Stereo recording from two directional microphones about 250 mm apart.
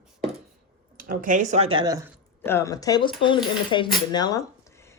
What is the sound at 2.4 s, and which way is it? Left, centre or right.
Speech, centre.